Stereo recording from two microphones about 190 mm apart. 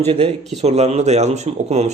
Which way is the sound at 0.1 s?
30° right (ahead or behind).